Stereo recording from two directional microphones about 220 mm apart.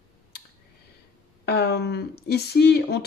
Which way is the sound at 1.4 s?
45° left (ahead or behind).